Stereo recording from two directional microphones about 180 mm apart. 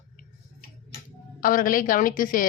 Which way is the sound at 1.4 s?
50° left (ahead or behind).